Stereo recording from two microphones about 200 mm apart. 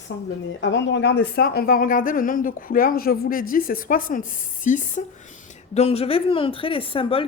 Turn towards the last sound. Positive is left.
turn(degrees=25)  # may be behind; listen again after turning